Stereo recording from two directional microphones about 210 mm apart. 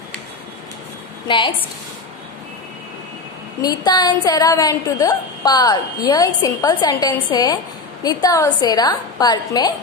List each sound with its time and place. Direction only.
1.2 s a woman's voice: 25° left (ahead or behind)
3.6 s a woman's voice: 20° left (ahead or behind)